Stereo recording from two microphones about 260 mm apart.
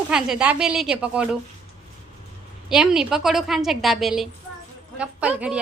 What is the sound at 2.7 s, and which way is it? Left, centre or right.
A woman's voice, centre.